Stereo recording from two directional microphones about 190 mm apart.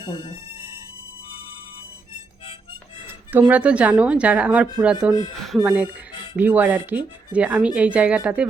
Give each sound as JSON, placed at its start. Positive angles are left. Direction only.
{"t": 0.0, "sound": "speech", "side_deg": 25}
{"t": 3.3, "sound": "speech", "side_deg": -5}